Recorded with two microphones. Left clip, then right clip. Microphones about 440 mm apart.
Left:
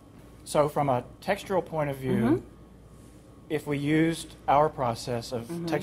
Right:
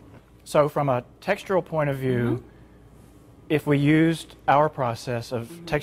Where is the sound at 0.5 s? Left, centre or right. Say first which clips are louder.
Right 3 dB; right.